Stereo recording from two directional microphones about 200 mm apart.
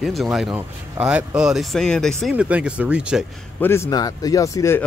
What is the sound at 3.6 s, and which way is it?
Speech, 15° left (ahead or behind).